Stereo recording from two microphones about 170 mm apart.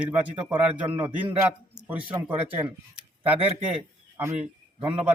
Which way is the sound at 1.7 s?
10° right (ahead or behind).